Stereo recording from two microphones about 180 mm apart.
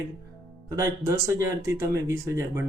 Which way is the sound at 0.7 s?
15° right (ahead or behind).